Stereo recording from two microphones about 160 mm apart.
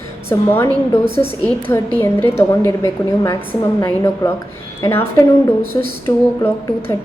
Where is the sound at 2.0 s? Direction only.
15° left (ahead or behind).